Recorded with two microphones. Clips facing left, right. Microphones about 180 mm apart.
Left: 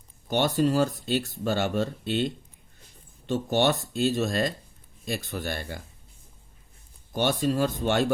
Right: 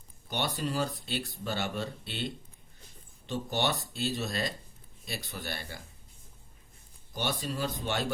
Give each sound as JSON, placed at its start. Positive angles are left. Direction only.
{"t": 0.3, "sound": "speech", "side_deg": 50}
{"t": 7.1, "sound": "speech", "side_deg": 50}